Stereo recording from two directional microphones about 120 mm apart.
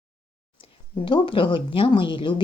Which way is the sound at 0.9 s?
45° left (ahead or behind).